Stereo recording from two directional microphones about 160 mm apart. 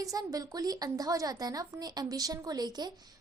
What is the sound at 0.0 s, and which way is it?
A woman's voice, 20° right (ahead or behind).